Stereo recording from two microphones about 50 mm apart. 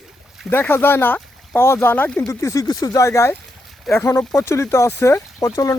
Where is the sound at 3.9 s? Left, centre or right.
Left.